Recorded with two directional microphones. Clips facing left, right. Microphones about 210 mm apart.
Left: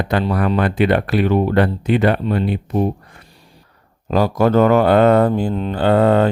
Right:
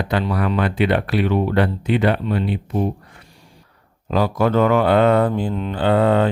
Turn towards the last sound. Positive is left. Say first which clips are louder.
# left 3 dB
turn(degrees=45)  # may be behind; listen again after turning